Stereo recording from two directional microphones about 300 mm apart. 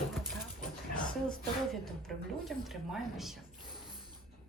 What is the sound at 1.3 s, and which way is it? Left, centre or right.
A woman's voice, centre.